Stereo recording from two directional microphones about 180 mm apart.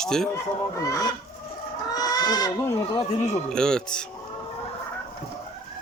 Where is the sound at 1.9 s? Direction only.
20° left (ahead or behind).